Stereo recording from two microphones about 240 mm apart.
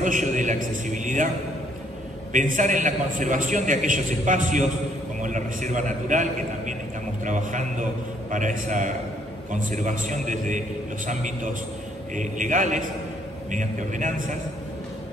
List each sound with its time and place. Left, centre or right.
0.0 s a man's voice: right
2.3 s a man's voice: right